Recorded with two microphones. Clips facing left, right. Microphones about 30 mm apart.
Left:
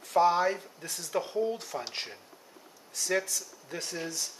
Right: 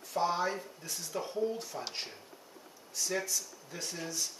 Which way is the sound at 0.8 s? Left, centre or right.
Left.